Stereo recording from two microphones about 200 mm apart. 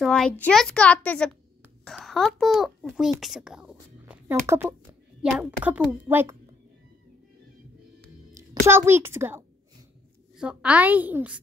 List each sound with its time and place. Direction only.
0.0 s a child's voice: 5° left (ahead or behind)
8.4 s a child's voice: 10° right (ahead or behind)